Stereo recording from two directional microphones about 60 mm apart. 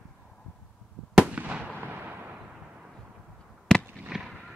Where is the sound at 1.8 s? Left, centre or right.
Right.